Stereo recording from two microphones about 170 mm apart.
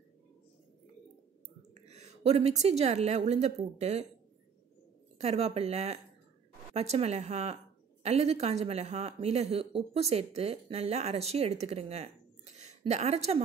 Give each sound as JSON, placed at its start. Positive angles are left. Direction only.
{"t": 1.7, "sound": "a woman's voice", "side_deg": -40}
{"t": 5.2, "sound": "speech", "side_deg": -35}
{"t": 12.5, "sound": "a sound", "side_deg": -40}